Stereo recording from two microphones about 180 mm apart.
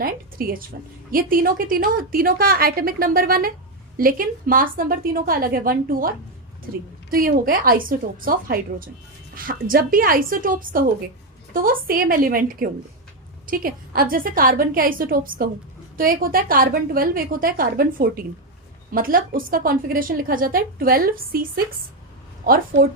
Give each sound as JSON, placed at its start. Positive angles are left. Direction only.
{"t": 0.0, "sound": "a woman's voice", "side_deg": -55}